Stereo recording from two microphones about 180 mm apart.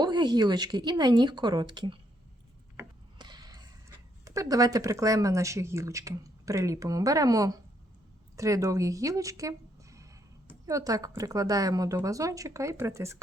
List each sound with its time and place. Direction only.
0.0 s speech: 25° right (ahead or behind)
3.2 s a sound: 25° right (ahead or behind)
4.3 s speech: 20° right (ahead or behind)